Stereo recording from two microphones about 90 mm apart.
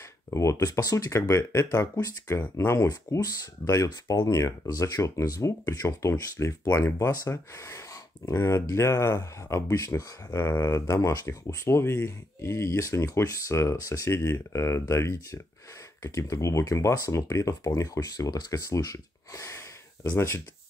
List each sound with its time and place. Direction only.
0.3 s speech: 35° left (ahead or behind)